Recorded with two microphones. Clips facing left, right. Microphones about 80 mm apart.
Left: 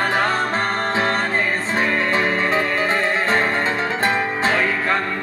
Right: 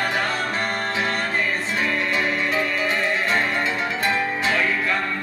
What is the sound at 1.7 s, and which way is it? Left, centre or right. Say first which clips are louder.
Music: left 5 dB; left.